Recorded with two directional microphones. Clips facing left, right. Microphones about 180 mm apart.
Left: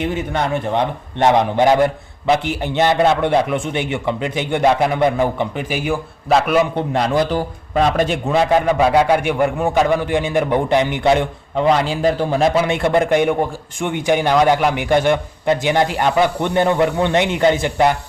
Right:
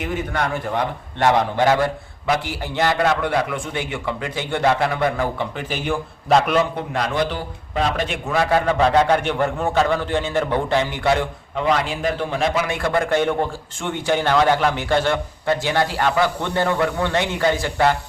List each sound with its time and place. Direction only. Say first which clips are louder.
0.0 s a man's voice: left 3 dB; 25° left (ahead or behind); by 6.6 s 5° left (ahead or behind)
6.7 s speech: left 5 dB; 30° left (ahead or behind)
8.3 s a man's voice: left 2 dB; 20° left (ahead or behind)
11.5 s speech: left 5 dB; 30° left (ahead or behind)
12.6 s a man's voice: left 5 dB; 25° left (ahead or behind)